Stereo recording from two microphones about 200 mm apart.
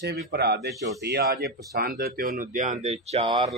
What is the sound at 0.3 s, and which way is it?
A man's voice, 55° right (ahead or behind).